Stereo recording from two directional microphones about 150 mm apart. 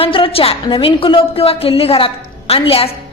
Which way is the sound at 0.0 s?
40° left (ahead or behind).